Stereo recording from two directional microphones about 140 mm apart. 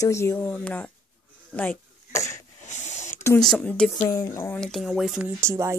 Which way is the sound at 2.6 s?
60° left (ahead or behind).